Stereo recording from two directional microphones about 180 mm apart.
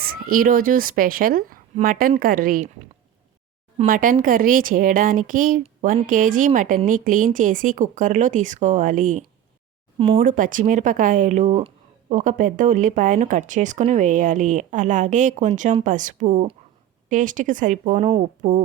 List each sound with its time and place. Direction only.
0.0 s speech: 55° right (ahead or behind)
3.8 s speech: 50° right (ahead or behind)